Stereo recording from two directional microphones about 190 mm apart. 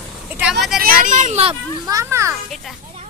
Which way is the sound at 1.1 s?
40° right (ahead or behind).